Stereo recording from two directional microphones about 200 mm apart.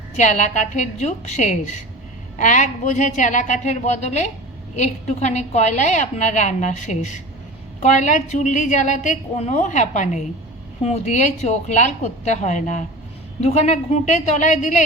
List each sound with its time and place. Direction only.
0.2 s a woman's voice: 35° left (ahead or behind)